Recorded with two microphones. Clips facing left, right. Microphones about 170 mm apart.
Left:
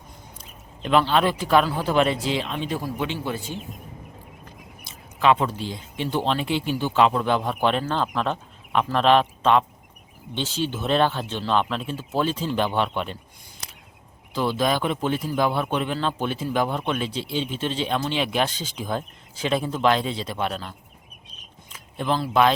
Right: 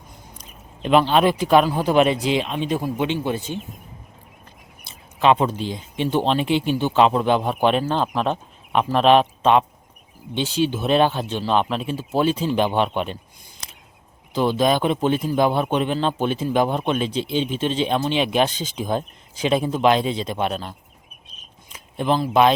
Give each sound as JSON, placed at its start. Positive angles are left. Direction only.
{"t": 0.3, "sound": "a man's voice", "side_deg": -15}
{"t": 4.8, "sound": "a man's voice", "side_deg": -25}
{"t": 14.3, "sound": "a man's voice", "side_deg": -20}